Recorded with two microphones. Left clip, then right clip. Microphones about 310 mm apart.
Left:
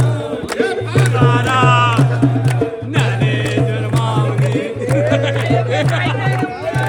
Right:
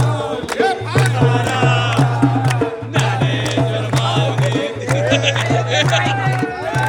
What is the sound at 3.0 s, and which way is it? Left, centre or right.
Music, centre.